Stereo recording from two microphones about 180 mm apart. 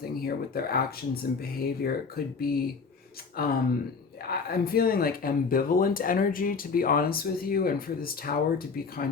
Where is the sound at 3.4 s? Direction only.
55° left (ahead or behind).